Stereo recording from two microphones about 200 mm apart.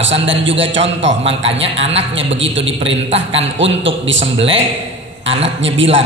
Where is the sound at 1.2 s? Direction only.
30° right (ahead or behind).